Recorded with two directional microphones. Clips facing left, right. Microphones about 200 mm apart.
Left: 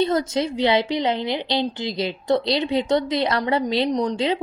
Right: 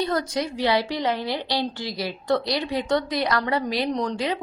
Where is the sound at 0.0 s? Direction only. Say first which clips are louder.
Left 4 dB; 25° left (ahead or behind).